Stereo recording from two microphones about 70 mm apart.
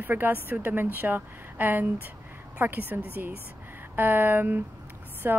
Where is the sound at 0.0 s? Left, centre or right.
Right.